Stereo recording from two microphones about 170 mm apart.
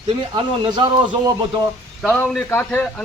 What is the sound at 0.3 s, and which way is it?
Speech, 30° right (ahead or behind).